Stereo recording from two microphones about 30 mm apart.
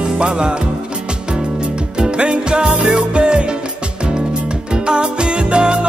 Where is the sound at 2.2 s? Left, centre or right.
Right.